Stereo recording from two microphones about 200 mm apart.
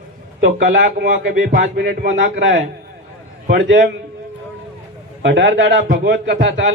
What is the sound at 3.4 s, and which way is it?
Speech, 50° right (ahead or behind).